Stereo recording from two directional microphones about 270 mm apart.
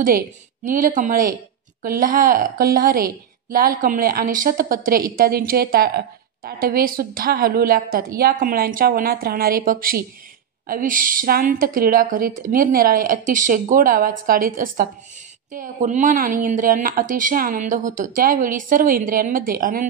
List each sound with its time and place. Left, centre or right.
0.7 s a woman's voice: right